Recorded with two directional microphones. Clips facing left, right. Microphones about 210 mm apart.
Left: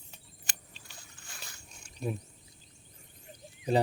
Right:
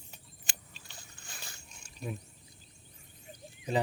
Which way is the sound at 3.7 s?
35° left (ahead or behind).